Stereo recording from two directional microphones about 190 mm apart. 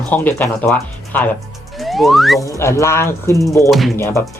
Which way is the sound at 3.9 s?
15° left (ahead or behind).